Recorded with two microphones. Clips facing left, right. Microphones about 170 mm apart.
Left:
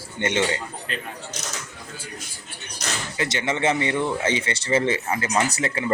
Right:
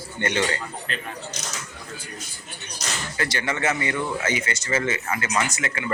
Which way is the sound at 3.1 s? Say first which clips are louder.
Left 2 dB; 20° left (ahead or behind).